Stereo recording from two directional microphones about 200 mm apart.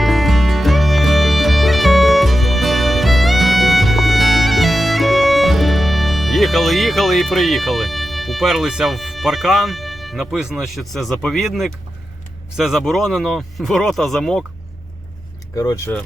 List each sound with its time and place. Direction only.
0.0 s music: centre (ahead or behind)
12.5 s speech: centre (ahead or behind)
15.5 s speech: 15° left (ahead or behind)